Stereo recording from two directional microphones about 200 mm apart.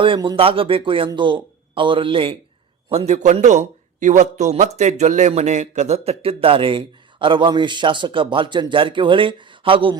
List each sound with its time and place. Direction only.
0.0 s a man's voice: 25° right (ahead or behind)